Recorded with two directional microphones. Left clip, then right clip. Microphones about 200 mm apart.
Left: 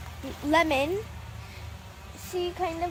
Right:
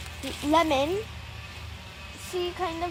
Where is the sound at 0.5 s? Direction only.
15° right (ahead or behind).